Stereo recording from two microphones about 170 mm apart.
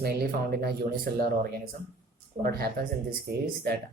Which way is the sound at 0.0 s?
65° right (ahead or behind).